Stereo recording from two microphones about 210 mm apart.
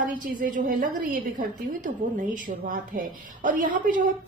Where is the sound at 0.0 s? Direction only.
40° right (ahead or behind).